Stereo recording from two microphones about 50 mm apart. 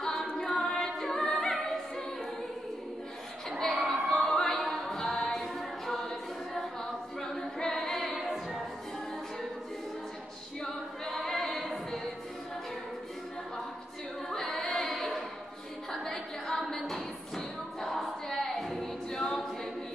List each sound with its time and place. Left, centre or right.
0.0 s a capella: centre
3.4 s a sound: centre
3.9 s music: centre
7.2 s a capella: centre
8.2 s choir: centre
10.6 s a capella: centre
14.3 s female singing: centre
15.9 s a sound: centre
17.8 s choir: centre
18.3 s a capella: centre